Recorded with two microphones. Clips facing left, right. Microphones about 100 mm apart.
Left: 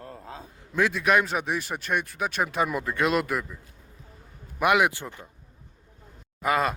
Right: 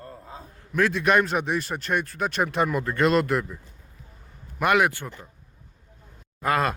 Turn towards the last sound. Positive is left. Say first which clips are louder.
# right 1 dB
turn(degrees=0)  # may be behind; listen again after turning